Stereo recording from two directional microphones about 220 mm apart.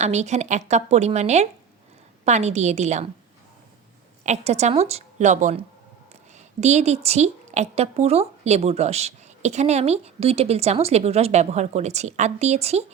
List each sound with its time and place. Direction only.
0.0 s a woman's voice: 30° right (ahead or behind)
4.3 s a woman's voice: 30° right (ahead or behind)